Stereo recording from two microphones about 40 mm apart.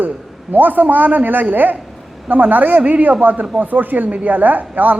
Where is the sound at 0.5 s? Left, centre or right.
Right.